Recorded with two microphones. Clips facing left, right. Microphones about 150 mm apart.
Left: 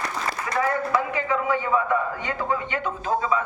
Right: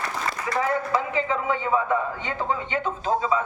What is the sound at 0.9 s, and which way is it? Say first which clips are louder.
A woman's voice: even; 25° right (ahead or behind).